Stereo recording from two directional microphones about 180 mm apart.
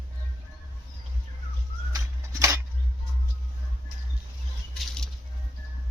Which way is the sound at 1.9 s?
15° right (ahead or behind).